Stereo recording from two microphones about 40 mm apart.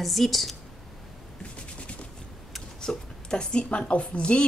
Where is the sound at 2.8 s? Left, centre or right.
Left.